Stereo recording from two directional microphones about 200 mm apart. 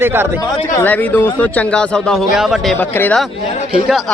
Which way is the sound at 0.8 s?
10° left (ahead or behind).